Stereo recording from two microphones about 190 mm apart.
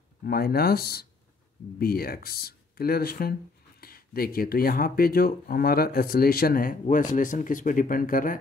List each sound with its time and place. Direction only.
0.2 s speech: 55° left (ahead or behind)